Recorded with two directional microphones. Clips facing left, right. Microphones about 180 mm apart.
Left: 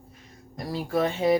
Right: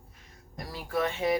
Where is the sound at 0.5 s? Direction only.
30° left (ahead or behind).